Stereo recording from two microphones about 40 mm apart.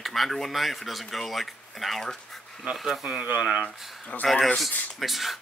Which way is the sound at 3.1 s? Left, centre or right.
Right.